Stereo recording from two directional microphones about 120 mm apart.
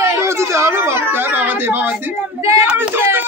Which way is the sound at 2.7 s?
15° right (ahead or behind).